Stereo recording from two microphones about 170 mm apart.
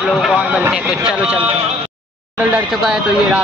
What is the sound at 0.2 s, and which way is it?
Speech, 5° right (ahead or behind).